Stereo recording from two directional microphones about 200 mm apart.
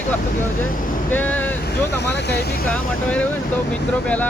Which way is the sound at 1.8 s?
60° left (ahead or behind).